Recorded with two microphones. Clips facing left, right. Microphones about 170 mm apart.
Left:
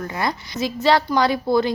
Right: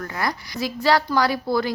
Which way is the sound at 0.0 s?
20° left (ahead or behind).